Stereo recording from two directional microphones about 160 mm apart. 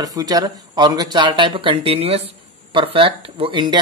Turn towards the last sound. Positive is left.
turn(degrees=-30)  # may be behind; listen again after turning